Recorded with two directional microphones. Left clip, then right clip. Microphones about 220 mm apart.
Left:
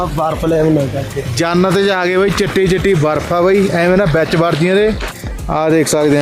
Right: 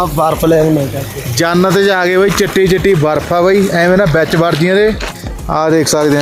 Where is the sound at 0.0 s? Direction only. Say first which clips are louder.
Right 4 dB; 35° right (ahead or behind).